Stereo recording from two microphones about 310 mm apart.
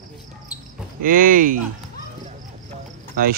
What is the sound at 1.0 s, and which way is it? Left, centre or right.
Speech, right.